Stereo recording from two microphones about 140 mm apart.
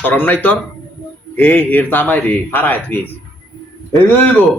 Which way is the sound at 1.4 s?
15° left (ahead or behind).